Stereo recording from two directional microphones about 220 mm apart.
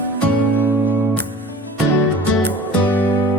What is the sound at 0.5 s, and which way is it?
Music, 10° right (ahead or behind).